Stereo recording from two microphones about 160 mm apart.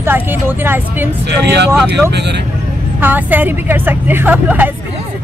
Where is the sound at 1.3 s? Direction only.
90° right.